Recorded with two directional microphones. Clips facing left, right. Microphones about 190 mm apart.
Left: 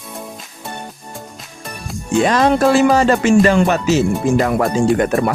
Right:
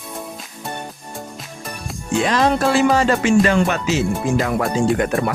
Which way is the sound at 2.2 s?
45° left (ahead or behind).